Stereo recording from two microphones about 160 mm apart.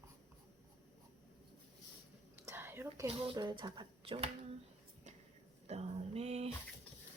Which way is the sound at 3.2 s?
30° right (ahead or behind).